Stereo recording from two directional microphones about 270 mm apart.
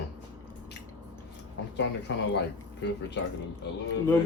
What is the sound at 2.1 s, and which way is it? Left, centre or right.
Speech, left.